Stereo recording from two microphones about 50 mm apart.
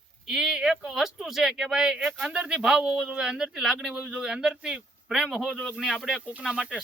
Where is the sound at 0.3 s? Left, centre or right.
Centre.